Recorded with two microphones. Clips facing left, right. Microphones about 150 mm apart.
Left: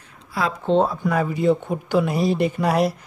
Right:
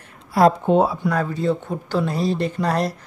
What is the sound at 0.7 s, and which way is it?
Speech, 10° right (ahead or behind).